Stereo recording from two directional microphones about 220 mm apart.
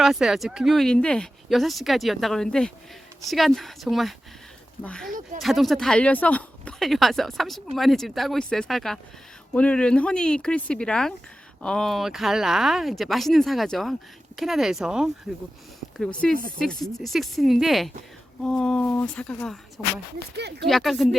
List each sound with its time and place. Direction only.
0.0 s speech: centre (ahead or behind)
16.2 s speech: centre (ahead or behind)
20.3 s speech: 50° right (ahead or behind)
20.7 s speech: centre (ahead or behind)